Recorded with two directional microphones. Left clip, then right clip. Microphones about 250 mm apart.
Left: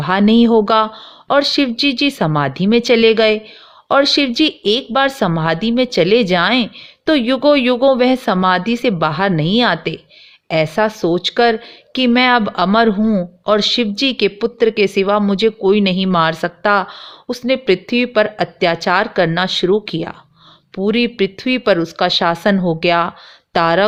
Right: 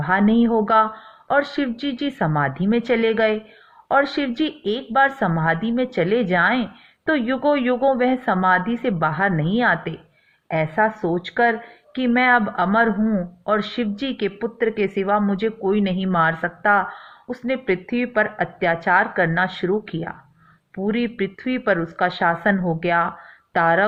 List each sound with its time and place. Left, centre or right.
0.0 s speech: left